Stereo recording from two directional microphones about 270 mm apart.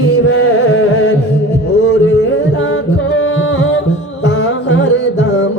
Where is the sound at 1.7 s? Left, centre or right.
Left.